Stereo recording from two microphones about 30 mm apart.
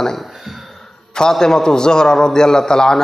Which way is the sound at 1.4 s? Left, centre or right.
Centre.